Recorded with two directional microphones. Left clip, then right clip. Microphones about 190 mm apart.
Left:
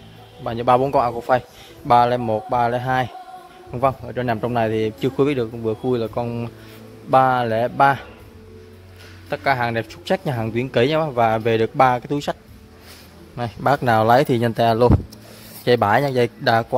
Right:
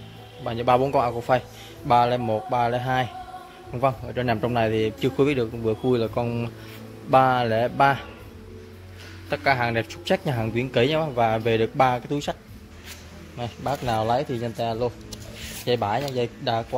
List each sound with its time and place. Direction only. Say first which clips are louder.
0.4 s a man's voice: left 4 dB; 25° left (ahead or behind)
9.3 s speech: left 2 dB; 15° left (ahead or behind)
13.4 s speech: left 9 dB; 35° left (ahead or behind)